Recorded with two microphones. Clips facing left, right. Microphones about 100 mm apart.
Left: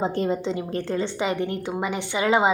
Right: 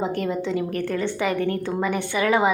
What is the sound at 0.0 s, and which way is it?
A woman's voice, 25° left (ahead or behind).